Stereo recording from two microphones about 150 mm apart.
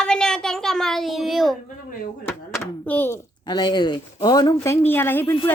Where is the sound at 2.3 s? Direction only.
15° left (ahead or behind).